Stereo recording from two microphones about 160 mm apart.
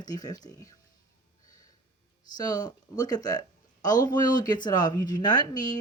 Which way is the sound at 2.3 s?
25° left (ahead or behind).